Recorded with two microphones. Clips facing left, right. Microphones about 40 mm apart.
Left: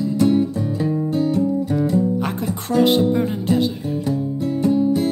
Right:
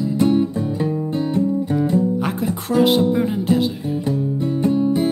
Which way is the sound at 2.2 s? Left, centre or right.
Centre.